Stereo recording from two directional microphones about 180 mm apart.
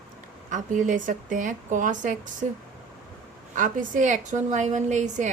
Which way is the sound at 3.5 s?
45° right (ahead or behind).